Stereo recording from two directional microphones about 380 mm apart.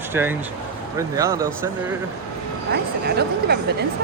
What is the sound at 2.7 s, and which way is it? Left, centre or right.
Speech, right.